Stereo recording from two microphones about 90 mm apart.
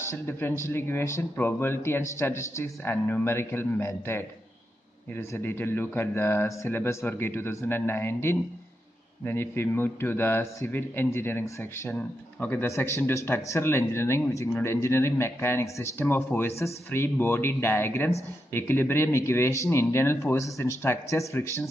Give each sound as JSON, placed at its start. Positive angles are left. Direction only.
{"t": 0.1, "sound": "speech", "side_deg": 25}
{"t": 12.6, "sound": "a man's voice", "side_deg": 30}